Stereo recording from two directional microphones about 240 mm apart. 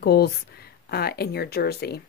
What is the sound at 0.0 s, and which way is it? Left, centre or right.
Speech, left.